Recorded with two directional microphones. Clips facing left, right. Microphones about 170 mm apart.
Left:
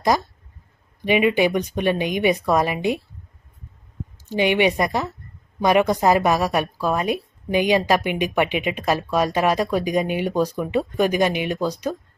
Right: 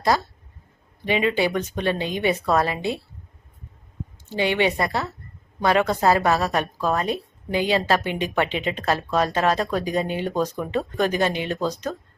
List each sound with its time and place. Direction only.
0.1 s a woman's voice: 15° left (ahead or behind)
4.3 s a woman's voice: 15° left (ahead or behind)